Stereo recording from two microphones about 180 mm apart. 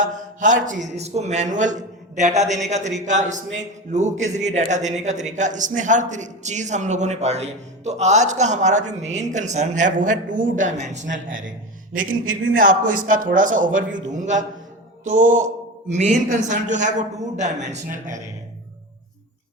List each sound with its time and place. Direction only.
0.0 s a man's voice: 45° right (ahead or behind)
12.5 s a man's voice: 50° right (ahead or behind)